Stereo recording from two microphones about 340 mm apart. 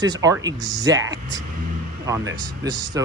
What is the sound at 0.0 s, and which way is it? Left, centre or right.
Speech, centre.